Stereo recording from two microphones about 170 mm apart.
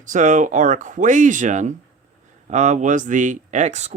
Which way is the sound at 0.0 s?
50° right (ahead or behind).